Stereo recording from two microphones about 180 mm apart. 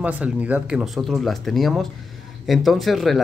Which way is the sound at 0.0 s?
10° right (ahead or behind).